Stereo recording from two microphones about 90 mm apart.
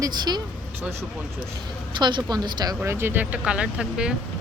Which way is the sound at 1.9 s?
60° right (ahead or behind).